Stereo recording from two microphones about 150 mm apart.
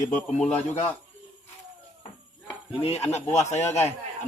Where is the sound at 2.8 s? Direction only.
45° left (ahead or behind).